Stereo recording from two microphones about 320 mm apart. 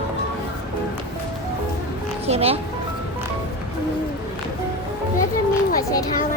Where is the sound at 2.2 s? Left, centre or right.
Centre.